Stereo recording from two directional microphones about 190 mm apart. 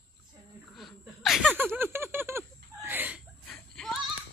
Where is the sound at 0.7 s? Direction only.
Centre (ahead or behind).